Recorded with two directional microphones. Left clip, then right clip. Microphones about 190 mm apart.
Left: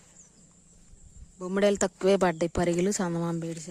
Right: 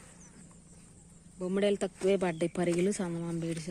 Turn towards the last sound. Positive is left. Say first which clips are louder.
# even
turn(degrees=15)  # may be behind; listen again after turning